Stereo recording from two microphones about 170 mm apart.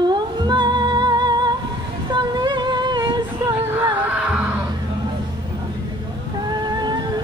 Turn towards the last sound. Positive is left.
turn(degrees=-25)  # may be behind; listen again after turning